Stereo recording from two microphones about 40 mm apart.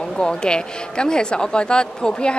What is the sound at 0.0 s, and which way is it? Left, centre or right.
Speech, centre.